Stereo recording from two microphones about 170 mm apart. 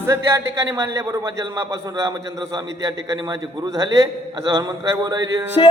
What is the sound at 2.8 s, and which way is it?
A man's voice, 25° right (ahead or behind).